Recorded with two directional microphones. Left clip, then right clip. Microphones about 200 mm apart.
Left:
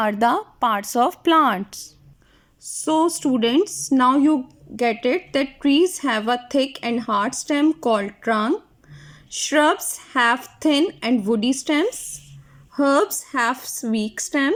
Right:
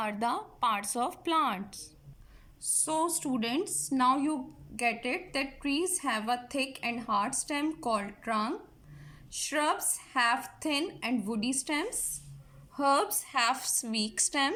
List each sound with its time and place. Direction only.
0.0 s a woman's voice: 40° left (ahead or behind)
13.2 s a woman's voice: 45° left (ahead or behind)
13.6 s a woman's voice: 20° left (ahead or behind)
13.8 s a woman's voice: 40° left (ahead or behind)